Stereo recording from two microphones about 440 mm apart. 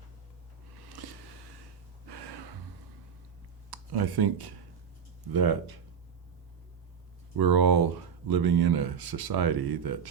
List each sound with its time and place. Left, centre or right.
1.0 s a sound: right
2.0 s gasp: right
3.7 s speech: right
7.3 s speech: right